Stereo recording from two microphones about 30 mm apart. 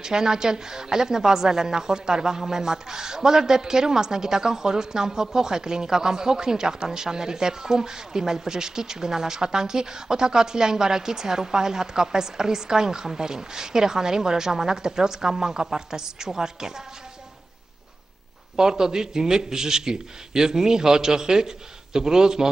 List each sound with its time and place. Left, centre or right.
0.0 s a woman's voice: right
18.6 s a woman's voice: right